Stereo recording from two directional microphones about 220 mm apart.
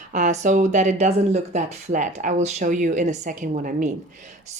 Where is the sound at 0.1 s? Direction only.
35° right (ahead or behind).